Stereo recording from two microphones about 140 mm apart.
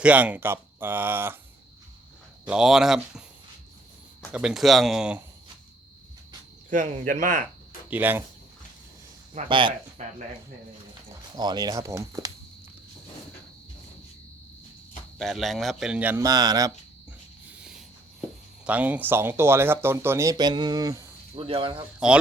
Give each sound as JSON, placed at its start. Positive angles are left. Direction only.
{"t": 0.0, "sound": "speech", "side_deg": -10}
{"t": 2.5, "sound": "a man's voice", "side_deg": -5}
{"t": 4.3, "sound": "a man's voice", "side_deg": -5}
{"t": 6.7, "sound": "speech", "side_deg": -65}
{"t": 7.9, "sound": "speech", "side_deg": -15}
{"t": 9.5, "sound": "speech", "side_deg": -35}
{"t": 10.0, "sound": "speech", "side_deg": -55}
{"t": 11.3, "sound": "speech", "side_deg": -30}
{"t": 15.2, "sound": "a man's voice", "side_deg": 0}
{"t": 16.2, "sound": "speech", "side_deg": -25}
{"t": 17.5, "sound": "a sound", "side_deg": -5}
{"t": 18.6, "sound": "speech", "side_deg": -10}
{"t": 21.3, "sound": "speech", "side_deg": -40}